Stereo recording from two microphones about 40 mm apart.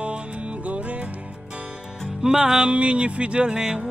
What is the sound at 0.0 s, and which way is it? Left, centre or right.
Music, right.